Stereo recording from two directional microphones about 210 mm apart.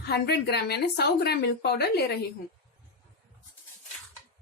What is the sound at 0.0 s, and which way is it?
A woman's voice, 50° left (ahead or behind).